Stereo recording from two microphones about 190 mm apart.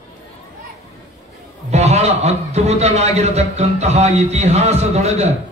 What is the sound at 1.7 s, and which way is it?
A man's voice, 35° right (ahead or behind).